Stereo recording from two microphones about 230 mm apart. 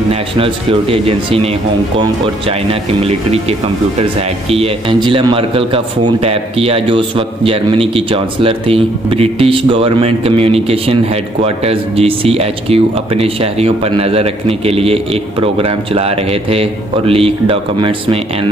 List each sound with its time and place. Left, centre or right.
0.1 s speech: right